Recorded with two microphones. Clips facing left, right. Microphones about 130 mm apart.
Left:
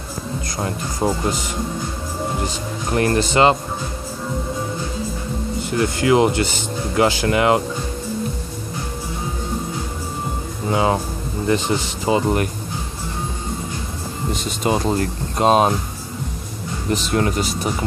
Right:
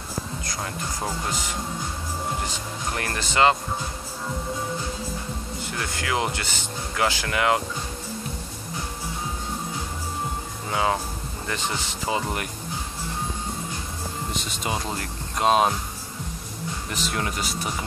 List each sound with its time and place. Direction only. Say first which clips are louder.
0.6 s speech: left 8 dB; 30° left (ahead or behind)
2.9 s speech: left 12 dB; 25° left (ahead or behind)
5.8 s speech: left 12 dB; 25° left (ahead or behind)
10.7 s speech: left 6 dB; 25° left (ahead or behind)
14.6 s speech: left 11 dB; 40° left (ahead or behind)
16.9 s speech: left 10 dB; 25° left (ahead or behind)